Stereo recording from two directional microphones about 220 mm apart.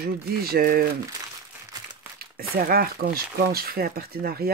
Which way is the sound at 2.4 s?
45° right (ahead or behind).